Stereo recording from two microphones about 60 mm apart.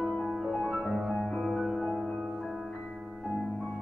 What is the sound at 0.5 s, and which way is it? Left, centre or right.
Music, centre.